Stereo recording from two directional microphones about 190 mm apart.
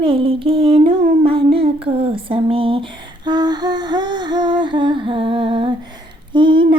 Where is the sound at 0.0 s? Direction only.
30° right (ahead or behind).